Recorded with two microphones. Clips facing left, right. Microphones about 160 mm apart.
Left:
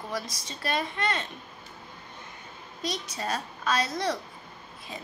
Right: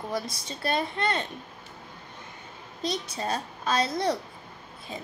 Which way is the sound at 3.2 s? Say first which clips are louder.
Right 2 dB; 30° right (ahead or behind).